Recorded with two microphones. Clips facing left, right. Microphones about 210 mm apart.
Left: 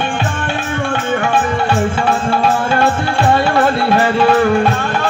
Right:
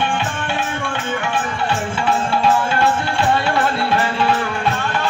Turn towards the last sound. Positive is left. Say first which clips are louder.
# left 6 dB
turn(degrees=45)  # may be behind; listen again after turning